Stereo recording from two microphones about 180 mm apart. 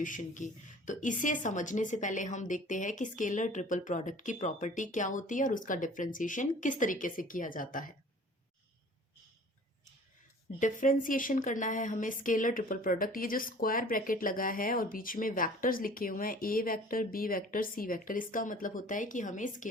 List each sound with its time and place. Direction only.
0.0 s a woman's voice: 45° left (ahead or behind)
10.6 s a woman's voice: 45° left (ahead or behind)